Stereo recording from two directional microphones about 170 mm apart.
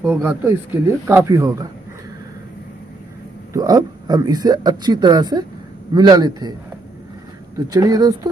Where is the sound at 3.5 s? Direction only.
20° right (ahead or behind).